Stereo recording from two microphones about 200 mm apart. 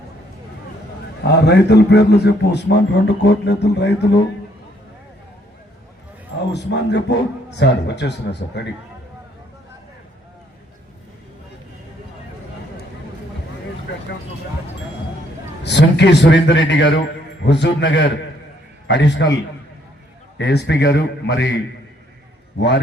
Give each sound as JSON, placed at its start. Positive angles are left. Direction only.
{"t": 1.2, "sound": "a man's voice", "side_deg": 55}
{"t": 6.5, "sound": "a man's voice", "side_deg": 60}
{"t": 15.6, "sound": "a man's voice", "side_deg": 60}
{"t": 20.4, "sound": "a man's voice", "side_deg": 60}